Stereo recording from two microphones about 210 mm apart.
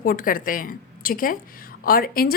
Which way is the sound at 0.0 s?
40° left (ahead or behind).